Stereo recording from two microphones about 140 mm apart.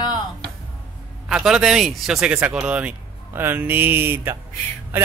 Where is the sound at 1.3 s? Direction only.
5° right (ahead or behind).